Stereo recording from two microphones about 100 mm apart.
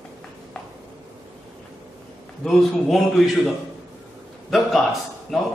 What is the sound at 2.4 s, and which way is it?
Speech, 5° left (ahead or behind).